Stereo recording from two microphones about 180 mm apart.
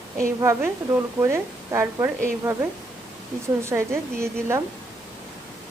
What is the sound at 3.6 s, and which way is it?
Speech, 15° right (ahead or behind).